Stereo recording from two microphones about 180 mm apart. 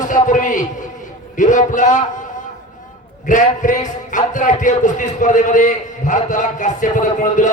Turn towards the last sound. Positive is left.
turn(degrees=45)  # may be behind; listen again after turning